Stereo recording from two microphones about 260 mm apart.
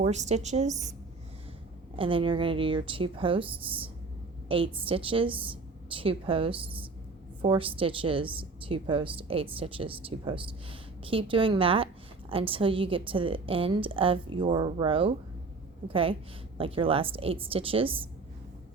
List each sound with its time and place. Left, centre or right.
0.0 s a woman's voice: right
2.0 s a woman's voice: centre